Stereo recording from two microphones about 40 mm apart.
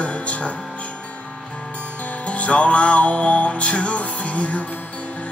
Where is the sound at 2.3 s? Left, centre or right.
Left.